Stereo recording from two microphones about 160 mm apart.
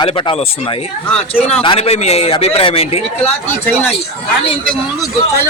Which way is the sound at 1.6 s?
35° left (ahead or behind).